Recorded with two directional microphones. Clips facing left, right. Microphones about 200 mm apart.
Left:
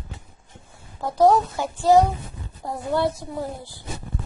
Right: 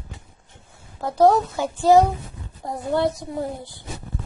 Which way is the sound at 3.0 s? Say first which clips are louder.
Right 2 dB; 20° right (ahead or behind).